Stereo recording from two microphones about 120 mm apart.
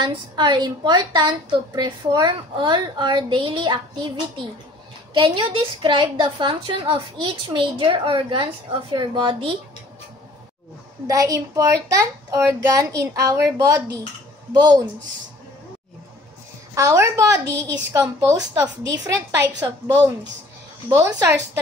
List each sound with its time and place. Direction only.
0.0 s a woman's voice: 40° right (ahead or behind)
11.1 s a child's voice: 30° right (ahead or behind)
16.7 s a child's voice: 25° right (ahead or behind)
20.9 s a child's voice: 25° right (ahead or behind)